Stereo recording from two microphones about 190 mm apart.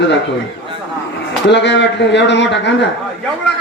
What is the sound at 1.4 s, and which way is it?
A man's voice, 65° left (ahead or behind).